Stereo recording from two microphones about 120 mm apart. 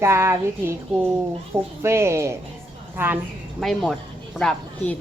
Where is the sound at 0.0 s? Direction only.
20° right (ahead or behind).